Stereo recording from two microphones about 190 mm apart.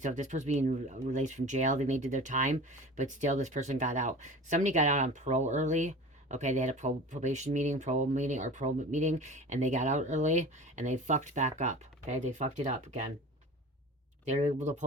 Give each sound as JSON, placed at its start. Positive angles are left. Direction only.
{"t": 0.0, "sound": "speech", "side_deg": -40}
{"t": 14.3, "sound": "speech", "side_deg": -35}